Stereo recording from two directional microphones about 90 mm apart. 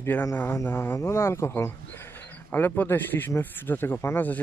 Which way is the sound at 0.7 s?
25° left (ahead or behind).